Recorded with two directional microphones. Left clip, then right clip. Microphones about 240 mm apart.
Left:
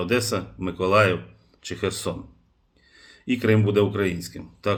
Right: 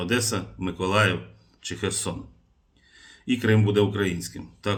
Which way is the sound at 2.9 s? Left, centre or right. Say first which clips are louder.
Even; left.